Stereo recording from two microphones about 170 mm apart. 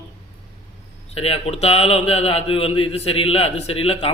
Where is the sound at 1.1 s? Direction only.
35° left (ahead or behind).